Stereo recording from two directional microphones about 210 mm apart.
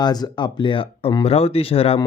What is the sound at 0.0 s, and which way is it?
Speech, 20° left (ahead or behind).